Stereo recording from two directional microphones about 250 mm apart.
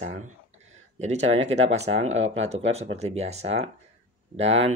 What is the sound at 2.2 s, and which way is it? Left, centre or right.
Speech, right.